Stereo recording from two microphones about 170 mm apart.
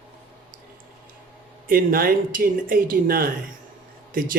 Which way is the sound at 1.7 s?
60° right (ahead or behind).